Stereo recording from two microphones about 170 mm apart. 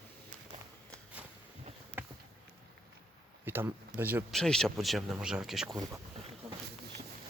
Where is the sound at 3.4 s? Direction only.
15° right (ahead or behind).